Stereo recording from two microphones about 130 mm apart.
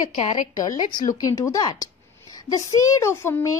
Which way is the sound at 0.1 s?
70° left (ahead or behind).